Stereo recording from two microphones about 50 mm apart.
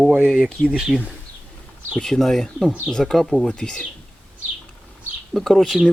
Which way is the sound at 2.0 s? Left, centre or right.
Centre.